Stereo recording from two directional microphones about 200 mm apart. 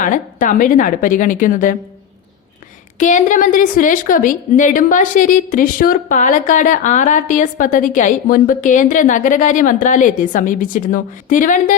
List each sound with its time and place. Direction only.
0.0 s a woman's voice: 40° left (ahead or behind)
3.0 s a woman's voice: 40° left (ahead or behind)